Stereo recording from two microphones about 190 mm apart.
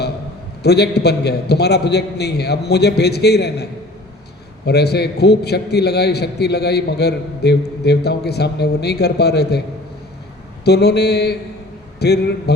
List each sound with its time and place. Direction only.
0.6 s a man's voice: 60° left (ahead or behind)
10.6 s a man's voice: 60° left (ahead or behind)